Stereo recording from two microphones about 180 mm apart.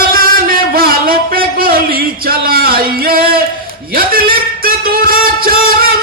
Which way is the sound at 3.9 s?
55° right (ahead or behind).